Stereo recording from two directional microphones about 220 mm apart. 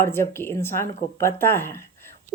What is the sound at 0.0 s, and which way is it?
Speech, 10° left (ahead or behind).